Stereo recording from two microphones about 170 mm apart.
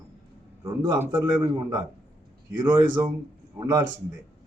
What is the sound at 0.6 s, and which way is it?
A man's voice, 15° right (ahead or behind).